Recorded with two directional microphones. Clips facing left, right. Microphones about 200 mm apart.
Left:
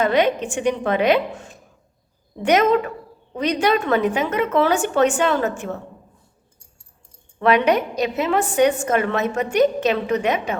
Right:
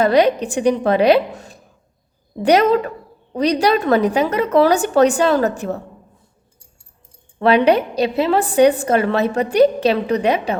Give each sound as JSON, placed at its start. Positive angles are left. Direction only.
{"t": 0.0, "sound": "a woman's voice", "side_deg": -35}
{"t": 7.3, "sound": "a woman's voice", "side_deg": -30}